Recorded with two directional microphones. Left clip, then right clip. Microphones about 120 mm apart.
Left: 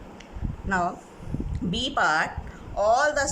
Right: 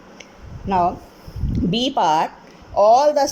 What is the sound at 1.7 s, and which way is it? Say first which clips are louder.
A woman's voice: right 5 dB; 30° right (ahead or behind).